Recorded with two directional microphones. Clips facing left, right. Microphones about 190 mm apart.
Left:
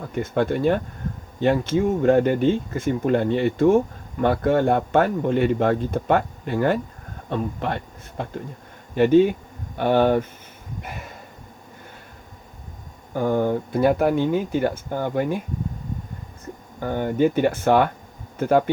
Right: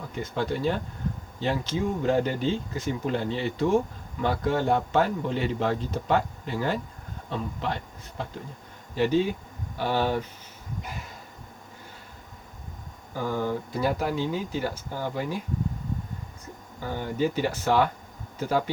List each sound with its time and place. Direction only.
0.1 s speech: 55° left (ahead or behind)
9.0 s speech: 55° left (ahead or behind)
13.1 s speech: 55° left (ahead or behind)
16.8 s speech: 55° left (ahead or behind)